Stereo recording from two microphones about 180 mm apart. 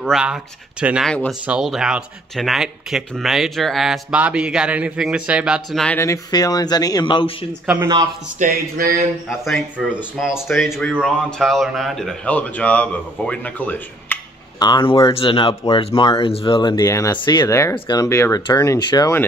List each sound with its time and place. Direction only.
0.0 s speech: 5° right (ahead or behind)
5.9 s speech: 15° left (ahead or behind)
7.6 s speech: 10° right (ahead or behind)
8.4 s a sound: 55° right (ahead or behind)
10.1 s speech: 5° right (ahead or behind)
14.6 s speech: 25° left (ahead or behind)